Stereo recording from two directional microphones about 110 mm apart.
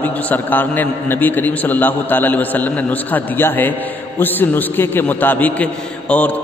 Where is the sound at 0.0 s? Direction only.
15° left (ahead or behind).